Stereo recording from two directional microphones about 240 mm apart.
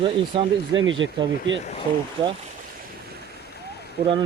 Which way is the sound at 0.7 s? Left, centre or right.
Right.